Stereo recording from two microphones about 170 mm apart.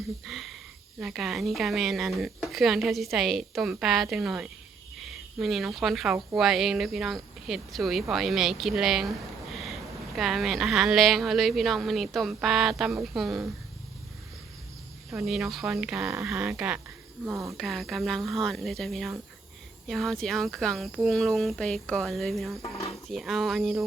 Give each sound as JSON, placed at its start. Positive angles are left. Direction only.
{"t": 0.3, "sound": "speech", "side_deg": 0}
{"t": 15.1, "sound": "speech", "side_deg": 0}
{"t": 22.6, "sound": "speech", "side_deg": 35}
{"t": 23.0, "sound": "speech", "side_deg": 0}